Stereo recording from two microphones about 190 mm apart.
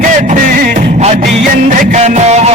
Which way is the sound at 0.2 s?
40° right (ahead or behind).